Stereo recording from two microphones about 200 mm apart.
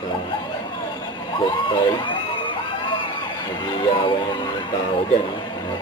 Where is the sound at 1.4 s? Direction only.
25° left (ahead or behind).